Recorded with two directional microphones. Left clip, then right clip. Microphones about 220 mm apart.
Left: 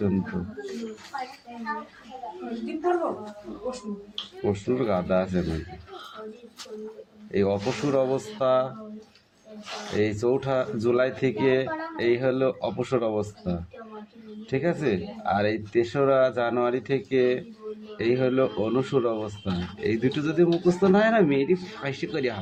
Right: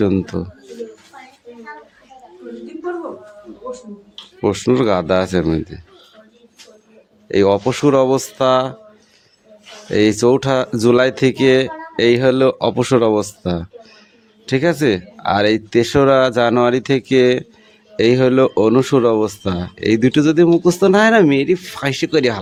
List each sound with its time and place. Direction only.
4.4 s speech: 55° right (ahead or behind)
7.3 s speech: 55° right (ahead or behind)
9.9 s speech: 55° right (ahead or behind)